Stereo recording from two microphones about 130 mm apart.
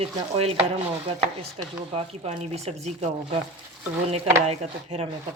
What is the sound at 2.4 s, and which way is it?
Speech, 55° right (ahead or behind).